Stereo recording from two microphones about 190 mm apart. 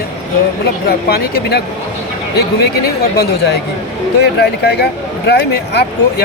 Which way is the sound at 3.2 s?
55° left (ahead or behind).